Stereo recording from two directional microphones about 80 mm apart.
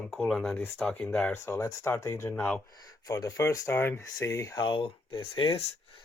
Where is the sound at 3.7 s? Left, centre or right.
Left.